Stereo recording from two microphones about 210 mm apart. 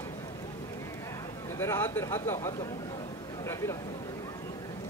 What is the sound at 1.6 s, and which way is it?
Speech, 10° left (ahead or behind).